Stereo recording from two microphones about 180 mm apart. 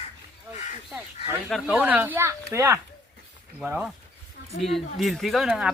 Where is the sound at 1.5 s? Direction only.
Centre (ahead or behind).